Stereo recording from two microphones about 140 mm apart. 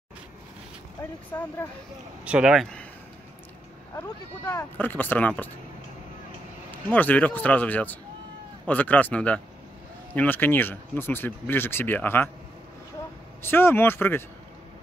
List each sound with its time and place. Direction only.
1.3 s speech: 20° left (ahead or behind)
2.2 s speech: 5° right (ahead or behind)
4.7 s speech: 15° left (ahead or behind)
6.9 s speech: 10° left (ahead or behind)
13.4 s speech: 15° left (ahead or behind)